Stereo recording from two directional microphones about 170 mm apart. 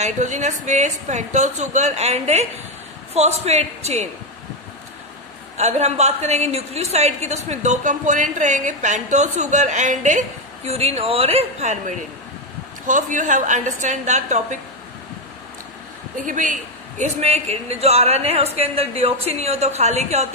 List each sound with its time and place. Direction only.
0.0 s a woman's voice: 45° right (ahead or behind)
5.6 s a woman's voice: 40° right (ahead or behind)
16.2 s a woman's voice: 50° right (ahead or behind)